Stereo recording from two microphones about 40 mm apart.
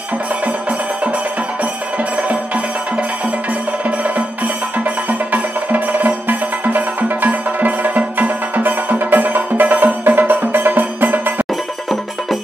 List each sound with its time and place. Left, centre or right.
0.5 s music: right